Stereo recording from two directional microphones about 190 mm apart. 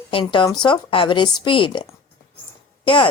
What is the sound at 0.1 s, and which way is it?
A woman's voice, 25° left (ahead or behind).